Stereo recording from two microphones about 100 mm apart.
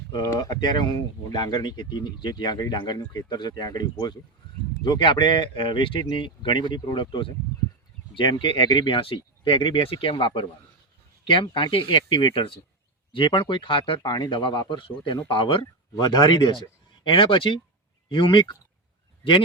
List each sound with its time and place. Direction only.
0.2 s speech: 45° left (ahead or behind); by 14.0 s 60° left (ahead or behind)
14.0 s speech: 45° left (ahead or behind)
16.0 s speech: 45° left (ahead or behind)
17.0 s speech: 60° left (ahead or behind)